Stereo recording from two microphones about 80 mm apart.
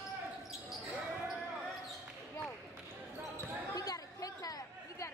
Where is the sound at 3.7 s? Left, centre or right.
Left.